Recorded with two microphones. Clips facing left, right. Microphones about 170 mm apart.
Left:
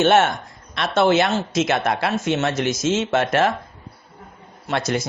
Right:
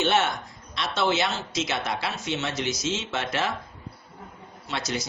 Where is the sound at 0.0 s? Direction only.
50° left (ahead or behind).